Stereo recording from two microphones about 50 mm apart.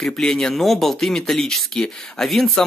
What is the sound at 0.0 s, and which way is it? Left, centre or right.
Speech, centre.